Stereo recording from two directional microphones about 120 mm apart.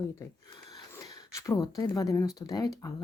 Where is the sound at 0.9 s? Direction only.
30° left (ahead or behind).